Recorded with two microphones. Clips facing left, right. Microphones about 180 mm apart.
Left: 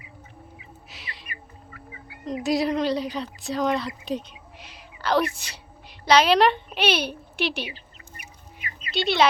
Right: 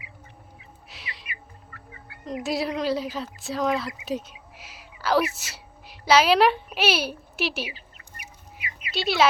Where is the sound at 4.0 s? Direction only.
5° right (ahead or behind).